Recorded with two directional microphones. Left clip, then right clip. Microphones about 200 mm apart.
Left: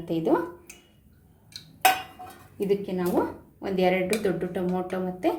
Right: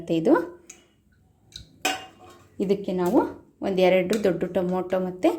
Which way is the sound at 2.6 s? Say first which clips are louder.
Right 2 dB; 45° right (ahead or behind).